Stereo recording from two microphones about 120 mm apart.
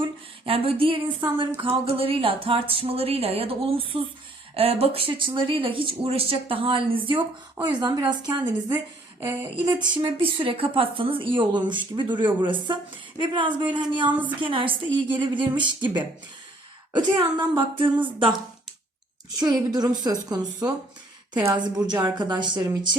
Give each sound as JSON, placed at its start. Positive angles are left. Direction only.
{"t": 0.0, "sound": "speech", "side_deg": -50}
{"t": 7.6, "sound": "speech", "side_deg": -35}
{"t": 17.6, "sound": "speech", "side_deg": -45}
{"t": 19.4, "sound": "speech", "side_deg": -35}